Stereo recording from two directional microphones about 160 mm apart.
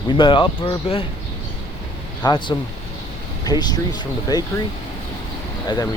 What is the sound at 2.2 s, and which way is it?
Speech, 30° left (ahead or behind).